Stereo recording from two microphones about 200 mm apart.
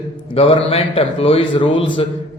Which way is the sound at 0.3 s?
25° left (ahead or behind).